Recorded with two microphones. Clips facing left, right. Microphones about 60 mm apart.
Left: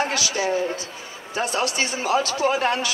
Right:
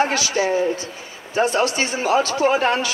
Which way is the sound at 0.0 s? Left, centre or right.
Right.